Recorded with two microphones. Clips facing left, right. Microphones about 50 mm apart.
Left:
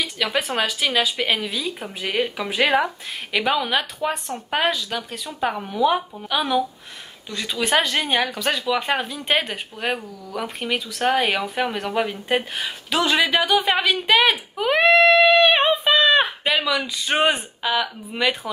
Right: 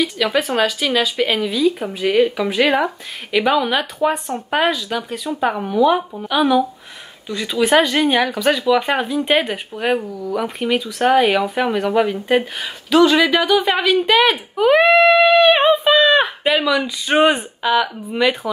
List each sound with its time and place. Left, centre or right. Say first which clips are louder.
0.2 s speech: right 4 dB; centre
7.2 s speech: right 6 dB; centre